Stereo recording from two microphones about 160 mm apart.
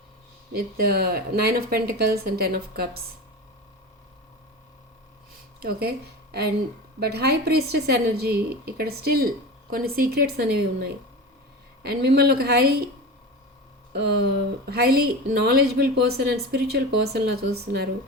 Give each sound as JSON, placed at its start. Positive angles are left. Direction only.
{"t": 0.5, "sound": "a woman's voice", "side_deg": -70}
{"t": 5.5, "sound": "a woman's voice", "side_deg": -75}
{"t": 13.9, "sound": "speech", "side_deg": -90}
{"t": 14.7, "sound": "a woman's voice", "side_deg": -80}